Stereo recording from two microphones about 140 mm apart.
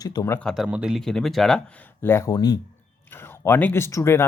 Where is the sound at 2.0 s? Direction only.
20° left (ahead or behind).